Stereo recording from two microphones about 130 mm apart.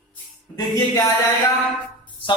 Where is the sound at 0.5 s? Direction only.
25° left (ahead or behind).